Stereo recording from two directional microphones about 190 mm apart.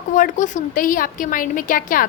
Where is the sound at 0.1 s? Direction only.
40° left (ahead or behind).